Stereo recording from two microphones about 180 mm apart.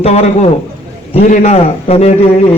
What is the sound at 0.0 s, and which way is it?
Speech, 35° left (ahead or behind).